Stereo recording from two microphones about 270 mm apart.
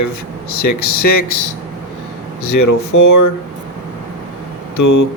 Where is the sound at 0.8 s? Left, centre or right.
Left.